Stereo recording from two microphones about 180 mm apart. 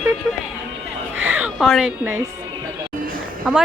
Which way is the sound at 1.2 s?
10° right (ahead or behind).